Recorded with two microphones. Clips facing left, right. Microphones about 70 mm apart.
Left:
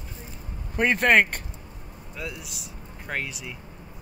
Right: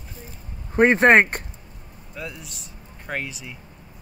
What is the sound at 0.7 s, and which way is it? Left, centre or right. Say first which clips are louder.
Speech: right 6 dB; right.